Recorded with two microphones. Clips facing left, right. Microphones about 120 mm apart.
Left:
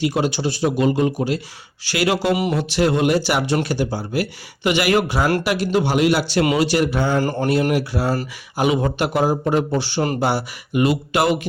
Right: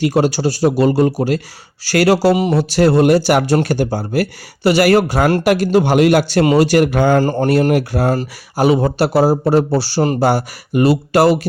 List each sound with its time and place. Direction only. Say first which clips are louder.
0.0 s a man's voice: right 5 dB; 40° right (ahead or behind)
6.4 s speech: right 6 dB; 35° right (ahead or behind)
6.7 s a man's voice: right 6 dB; 50° right (ahead or behind)
7.2 s speech: right 5 dB; 30° right (ahead or behind)
8.5 s speech: right 5 dB; 35° right (ahead or behind)
10.2 s speech: right 6 dB; 40° right (ahead or behind)